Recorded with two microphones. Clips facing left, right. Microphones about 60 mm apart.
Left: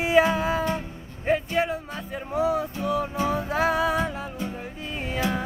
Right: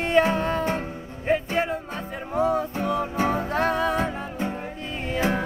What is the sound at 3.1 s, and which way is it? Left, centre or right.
Music, right.